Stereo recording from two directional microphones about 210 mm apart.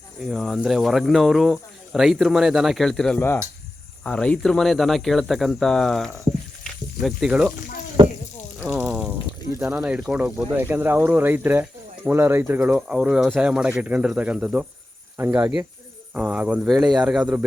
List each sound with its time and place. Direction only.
0.3 s speech: centre (ahead or behind)
6.7 s snake: centre (ahead or behind)
8.0 s sizzle: 20° right (ahead or behind)
8.6 s water: 5° right (ahead or behind)
9.6 s speech: 5° right (ahead or behind)